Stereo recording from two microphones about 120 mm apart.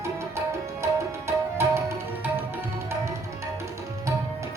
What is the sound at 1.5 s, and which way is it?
Tabla, 20° right (ahead or behind).